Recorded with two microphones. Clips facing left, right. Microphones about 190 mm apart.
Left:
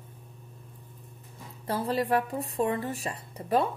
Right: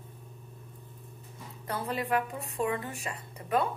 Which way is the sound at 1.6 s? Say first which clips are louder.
Left 5 dB; 30° left (ahead or behind).